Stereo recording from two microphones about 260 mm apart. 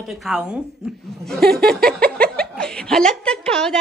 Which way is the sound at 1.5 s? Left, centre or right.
Right.